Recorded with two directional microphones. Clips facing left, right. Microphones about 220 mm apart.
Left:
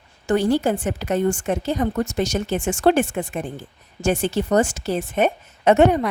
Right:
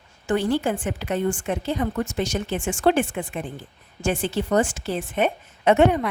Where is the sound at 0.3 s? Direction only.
40° left (ahead or behind).